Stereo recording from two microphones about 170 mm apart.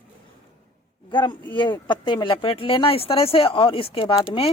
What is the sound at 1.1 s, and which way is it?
Speech, 30° left (ahead or behind).